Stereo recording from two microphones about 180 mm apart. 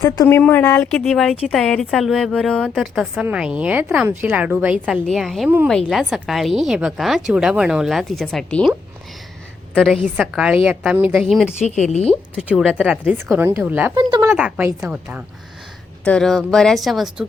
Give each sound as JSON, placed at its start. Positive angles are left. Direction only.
{"t": 0.0, "sound": "speech", "side_deg": 15}
{"t": 0.9, "sound": "a woman's voice", "side_deg": 0}
{"t": 9.7, "sound": "a woman's voice", "side_deg": 0}
{"t": 11.6, "sound": "speech", "side_deg": 40}
{"t": 12.4, "sound": "speech", "side_deg": -5}
{"t": 13.9, "sound": "speech", "side_deg": -25}
{"t": 14.3, "sound": "speech", "side_deg": -5}
{"t": 16.0, "sound": "a woman's voice", "side_deg": 5}